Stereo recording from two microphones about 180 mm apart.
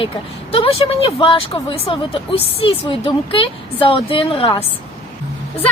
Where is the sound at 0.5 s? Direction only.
30° left (ahead or behind).